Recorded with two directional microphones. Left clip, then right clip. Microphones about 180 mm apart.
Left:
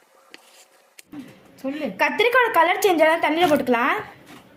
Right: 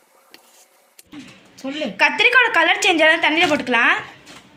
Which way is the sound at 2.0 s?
30° left (ahead or behind).